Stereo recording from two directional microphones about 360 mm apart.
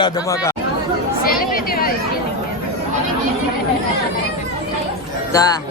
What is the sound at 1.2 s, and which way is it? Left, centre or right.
Speech, left.